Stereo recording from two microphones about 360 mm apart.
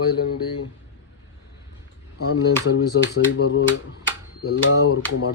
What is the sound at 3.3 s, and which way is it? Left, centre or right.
Speech, left.